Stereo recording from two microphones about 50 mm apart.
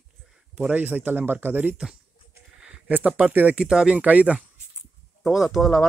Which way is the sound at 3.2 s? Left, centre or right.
Right.